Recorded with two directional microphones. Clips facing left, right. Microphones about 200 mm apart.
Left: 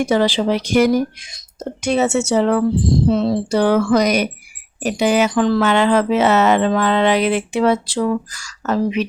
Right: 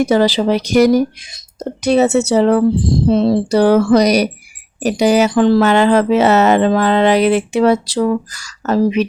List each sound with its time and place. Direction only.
0.0 s speech: 40° right (ahead or behind)